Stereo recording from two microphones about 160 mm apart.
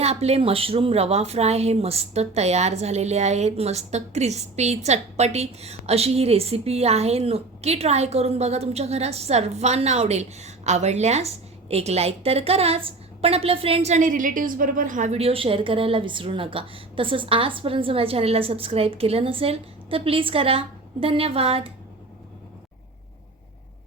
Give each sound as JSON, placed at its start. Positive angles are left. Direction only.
{"t": 0.0, "sound": "a woman's voice", "side_deg": -40}